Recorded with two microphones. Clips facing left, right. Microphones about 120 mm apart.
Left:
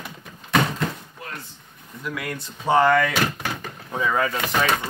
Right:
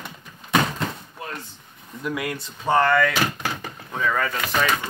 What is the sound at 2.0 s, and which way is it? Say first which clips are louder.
Speech: right 3 dB; 15° right (ahead or behind).